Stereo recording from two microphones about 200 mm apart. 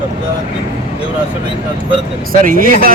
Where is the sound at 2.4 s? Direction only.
45° right (ahead or behind).